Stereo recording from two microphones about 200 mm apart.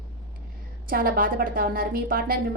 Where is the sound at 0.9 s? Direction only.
45° right (ahead or behind).